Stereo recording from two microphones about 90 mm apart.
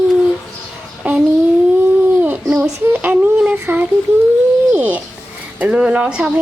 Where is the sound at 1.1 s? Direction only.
15° right (ahead or behind).